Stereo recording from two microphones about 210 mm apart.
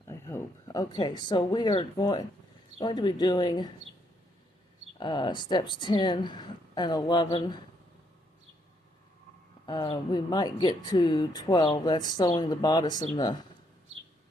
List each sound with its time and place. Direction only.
0.1 s speech: 15° left (ahead or behind)
4.9 s speech: 20° left (ahead or behind)
9.6 s speech: 20° left (ahead or behind)